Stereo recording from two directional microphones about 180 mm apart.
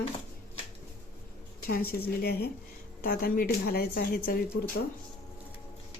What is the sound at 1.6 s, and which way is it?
A woman's voice, 55° left (ahead or behind).